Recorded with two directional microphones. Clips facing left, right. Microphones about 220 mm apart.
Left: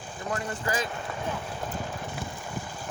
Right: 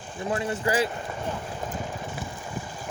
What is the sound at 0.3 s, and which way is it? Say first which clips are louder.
Speech: right 5 dB; 25° right (ahead or behind).